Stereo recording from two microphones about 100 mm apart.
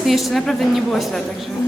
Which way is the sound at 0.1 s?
Centre (ahead or behind).